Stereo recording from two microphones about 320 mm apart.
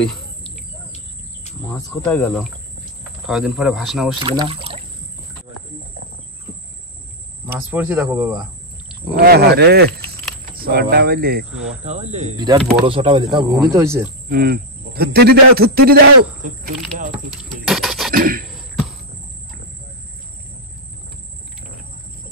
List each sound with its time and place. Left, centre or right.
1.7 s speech: centre
4.2 s speech: centre
7.7 s speech: centre
9.1 s speech: right; by 14.1 s centre
14.3 s speech: right
17.4 s a sound: centre
18.1 s a sound: right